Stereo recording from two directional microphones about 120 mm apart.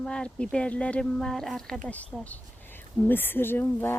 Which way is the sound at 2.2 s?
15° left (ahead or behind).